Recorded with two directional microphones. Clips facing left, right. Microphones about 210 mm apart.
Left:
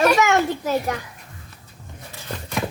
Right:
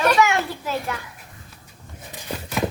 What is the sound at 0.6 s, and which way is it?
Children playing, 40° left (ahead or behind).